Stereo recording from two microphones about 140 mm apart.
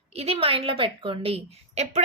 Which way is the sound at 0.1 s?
45° right (ahead or behind).